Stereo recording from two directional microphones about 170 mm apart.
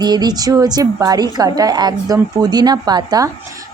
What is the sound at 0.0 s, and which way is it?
Speech, 25° right (ahead or behind).